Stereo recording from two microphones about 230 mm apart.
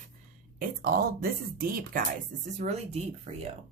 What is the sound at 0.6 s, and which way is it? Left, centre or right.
A woman's voice, right.